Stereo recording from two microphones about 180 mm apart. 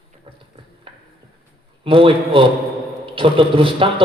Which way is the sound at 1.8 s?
30° right (ahead or behind).